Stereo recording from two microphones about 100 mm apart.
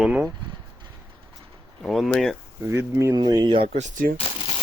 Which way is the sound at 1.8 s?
5° left (ahead or behind).